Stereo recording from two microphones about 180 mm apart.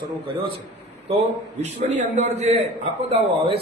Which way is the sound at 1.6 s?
40° right (ahead or behind).